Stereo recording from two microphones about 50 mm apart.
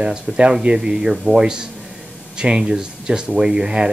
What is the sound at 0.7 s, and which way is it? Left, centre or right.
Speech, centre.